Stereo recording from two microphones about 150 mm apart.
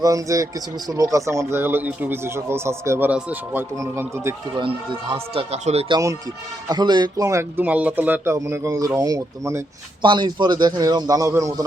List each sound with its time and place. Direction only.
0.0 s speech: 20° right (ahead or behind)
4.5 s speech: 35° right (ahead or behind)
6.7 s speech: 30° right (ahead or behind)
10.0 s speech: 30° right (ahead or behind)